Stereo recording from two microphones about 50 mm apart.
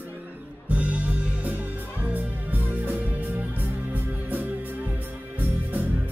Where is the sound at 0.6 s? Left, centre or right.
Right.